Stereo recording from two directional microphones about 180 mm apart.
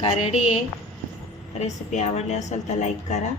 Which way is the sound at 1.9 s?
40° left (ahead or behind).